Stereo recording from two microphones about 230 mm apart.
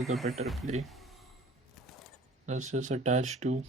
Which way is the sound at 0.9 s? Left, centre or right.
Centre.